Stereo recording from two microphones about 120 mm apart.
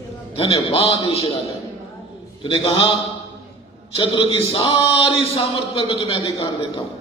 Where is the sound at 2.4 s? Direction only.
55° left (ahead or behind).